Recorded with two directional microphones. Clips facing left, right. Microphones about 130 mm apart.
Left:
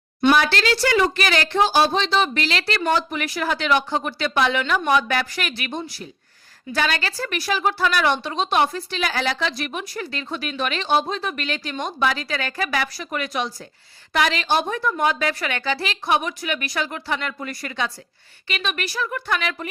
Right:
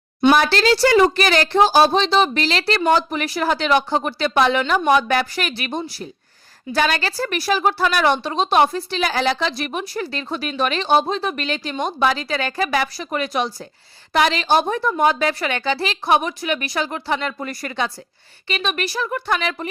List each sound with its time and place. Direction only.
0.3 s a woman's voice: 35° right (ahead or behind)